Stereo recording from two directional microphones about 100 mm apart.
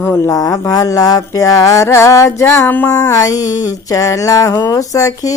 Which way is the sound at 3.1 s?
35° left (ahead or behind).